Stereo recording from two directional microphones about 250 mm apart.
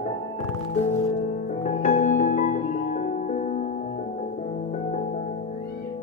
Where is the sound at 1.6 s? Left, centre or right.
Left.